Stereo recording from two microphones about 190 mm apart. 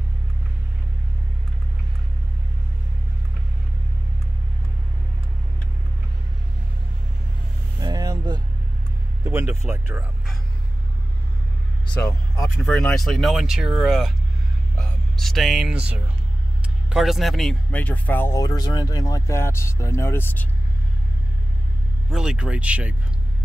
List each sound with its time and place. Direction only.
7.8 s vehicle: 20° right (ahead or behind)
9.2 s speech: 15° right (ahead or behind)
12.6 s speech: 5° left (ahead or behind)
22.1 s speech: 5° right (ahead or behind)